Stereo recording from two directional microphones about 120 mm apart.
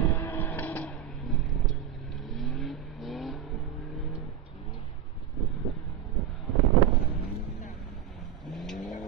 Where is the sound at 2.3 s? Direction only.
Centre (ahead or behind).